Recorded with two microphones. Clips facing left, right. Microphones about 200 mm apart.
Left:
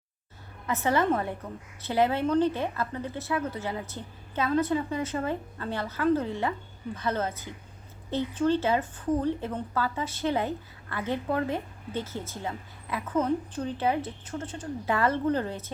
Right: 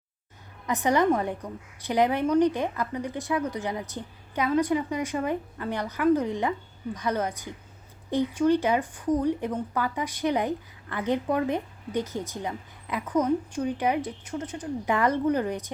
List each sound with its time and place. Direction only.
0.7 s a woman's voice: 15° right (ahead or behind)